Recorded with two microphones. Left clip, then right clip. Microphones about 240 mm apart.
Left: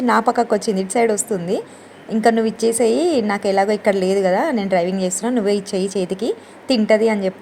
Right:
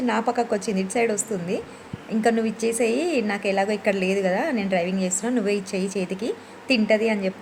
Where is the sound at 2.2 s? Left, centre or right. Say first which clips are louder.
Left 6 dB; centre.